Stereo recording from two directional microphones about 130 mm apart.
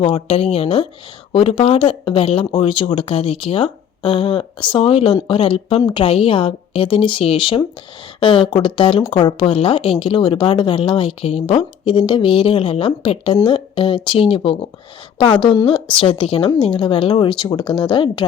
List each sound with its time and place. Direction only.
0.0 s speech: 45° left (ahead or behind)